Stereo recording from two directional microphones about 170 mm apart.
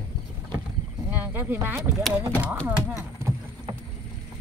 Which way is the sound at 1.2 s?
10° right (ahead or behind).